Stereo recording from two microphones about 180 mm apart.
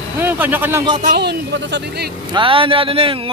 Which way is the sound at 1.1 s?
70° right (ahead or behind).